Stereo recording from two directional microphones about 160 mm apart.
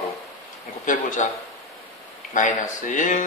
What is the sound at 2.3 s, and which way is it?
Speech, 50° left (ahead or behind).